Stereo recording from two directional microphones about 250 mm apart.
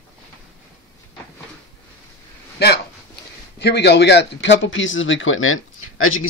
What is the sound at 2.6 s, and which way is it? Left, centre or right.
Speech, left.